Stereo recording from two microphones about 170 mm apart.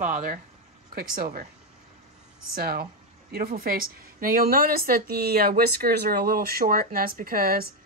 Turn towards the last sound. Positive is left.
turn(degrees=-60)  # may be behind; listen again after turning